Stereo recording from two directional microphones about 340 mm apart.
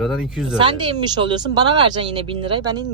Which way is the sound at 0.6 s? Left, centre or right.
Centre.